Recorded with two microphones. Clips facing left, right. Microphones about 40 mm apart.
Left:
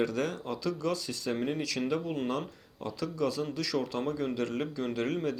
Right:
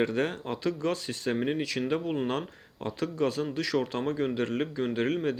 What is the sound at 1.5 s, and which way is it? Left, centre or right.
Speech, right.